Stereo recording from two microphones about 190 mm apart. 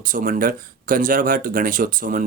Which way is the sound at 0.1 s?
45° right (ahead or behind).